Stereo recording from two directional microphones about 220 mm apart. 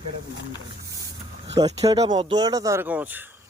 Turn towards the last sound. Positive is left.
turn(degrees=-10)  # may be behind; listen again after turning